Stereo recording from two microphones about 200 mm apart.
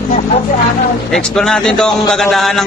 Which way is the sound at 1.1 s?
Centre (ahead or behind).